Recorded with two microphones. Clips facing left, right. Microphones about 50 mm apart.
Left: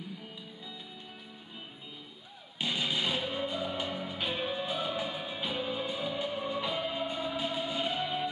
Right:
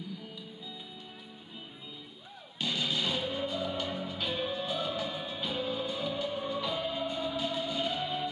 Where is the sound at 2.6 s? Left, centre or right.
Left.